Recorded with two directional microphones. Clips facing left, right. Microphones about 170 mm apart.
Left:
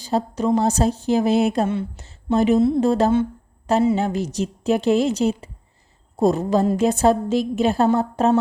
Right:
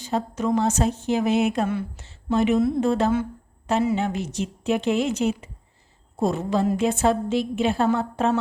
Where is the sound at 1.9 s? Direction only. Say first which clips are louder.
Left 3 dB; 35° left (ahead or behind).